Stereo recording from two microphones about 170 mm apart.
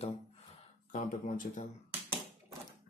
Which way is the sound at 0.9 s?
50° left (ahead or behind).